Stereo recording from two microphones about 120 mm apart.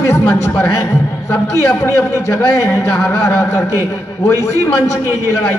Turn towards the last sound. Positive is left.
turn(degrees=25)  # may be behind; listen again after turning